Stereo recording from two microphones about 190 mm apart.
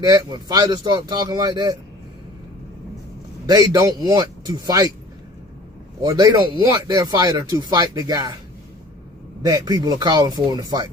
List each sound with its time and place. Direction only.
0.0 s speech: 20° right (ahead or behind)
3.4 s speech: 20° right (ahead or behind)
6.0 s speech: 20° right (ahead or behind)
9.4 s speech: 20° right (ahead or behind)